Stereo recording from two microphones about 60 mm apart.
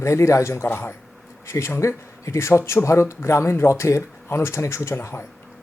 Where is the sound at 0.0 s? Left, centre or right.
Left.